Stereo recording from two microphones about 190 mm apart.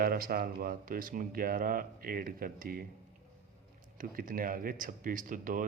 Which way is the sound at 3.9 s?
50° right (ahead or behind).